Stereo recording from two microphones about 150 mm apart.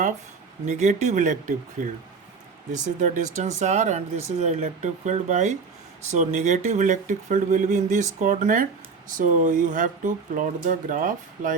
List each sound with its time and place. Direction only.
0.6 s speech: 50° right (ahead or behind)
3.0 s speech: 50° right (ahead or behind)